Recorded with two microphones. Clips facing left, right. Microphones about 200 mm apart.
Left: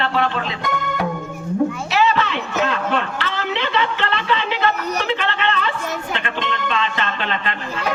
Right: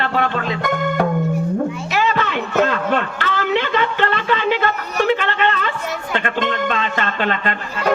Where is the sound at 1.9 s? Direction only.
45° right (ahead or behind).